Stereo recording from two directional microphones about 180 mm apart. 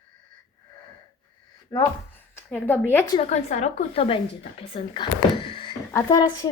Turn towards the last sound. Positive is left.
turn(degrees=20)  # may be behind; listen again after turning